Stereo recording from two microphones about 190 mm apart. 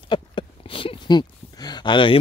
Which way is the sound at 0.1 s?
25° left (ahead or behind).